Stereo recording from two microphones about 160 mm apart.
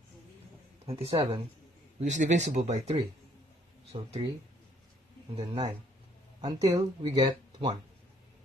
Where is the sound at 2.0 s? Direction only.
50° right (ahead or behind).